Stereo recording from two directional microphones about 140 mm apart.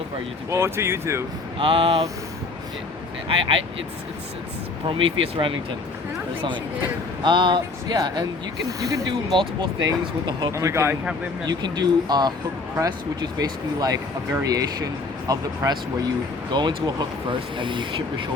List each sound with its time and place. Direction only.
0.5 s speech: 20° right (ahead or behind)
1.5 s speech: 40° right (ahead or behind)
3.2 s speech: 40° right (ahead or behind)
4.9 s speech: 40° right (ahead or behind)
7.2 s speech: 35° right (ahead or behind)
9.3 s speech: 35° right (ahead or behind); by 10.9 s 20° right (ahead or behind)
11.4 s speech: 30° right (ahead or behind)
13.4 s speech: 25° right (ahead or behind)
16.5 s speech: 30° right (ahead or behind)